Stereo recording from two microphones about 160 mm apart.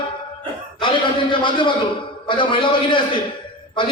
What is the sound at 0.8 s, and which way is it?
A man's voice, 30° left (ahead or behind).